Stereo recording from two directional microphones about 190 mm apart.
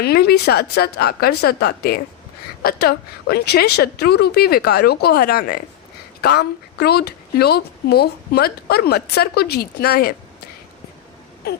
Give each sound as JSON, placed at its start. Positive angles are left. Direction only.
{"t": 0.0, "sound": "a woman's voice", "side_deg": 55}